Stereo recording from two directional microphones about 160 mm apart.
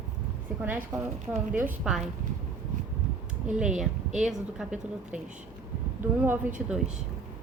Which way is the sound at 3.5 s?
5° right (ahead or behind).